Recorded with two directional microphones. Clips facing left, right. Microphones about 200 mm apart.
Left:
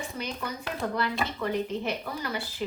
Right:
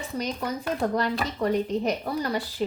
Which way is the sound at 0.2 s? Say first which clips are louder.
Right 8 dB; 40° right (ahead or behind).